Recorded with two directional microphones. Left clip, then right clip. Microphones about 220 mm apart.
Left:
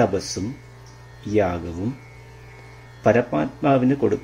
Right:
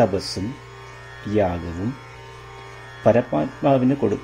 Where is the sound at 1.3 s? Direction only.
25° right (ahead or behind).